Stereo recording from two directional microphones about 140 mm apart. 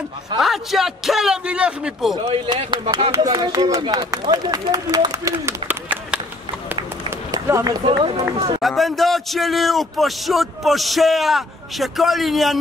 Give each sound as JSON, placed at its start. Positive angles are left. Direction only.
{"t": 0.4, "sound": "a man's voice", "side_deg": 0}
{"t": 2.2, "sound": "speech", "side_deg": -40}
{"t": 6.7, "sound": "run", "side_deg": -20}
{"t": 7.8, "sound": "speech", "side_deg": -40}
{"t": 8.5, "sound": "a man's voice", "side_deg": 0}